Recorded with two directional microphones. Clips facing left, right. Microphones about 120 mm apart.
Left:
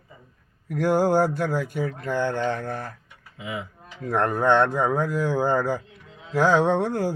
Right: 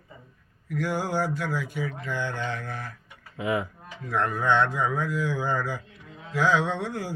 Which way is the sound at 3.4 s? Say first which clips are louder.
Right 6 dB; 60° right (ahead or behind).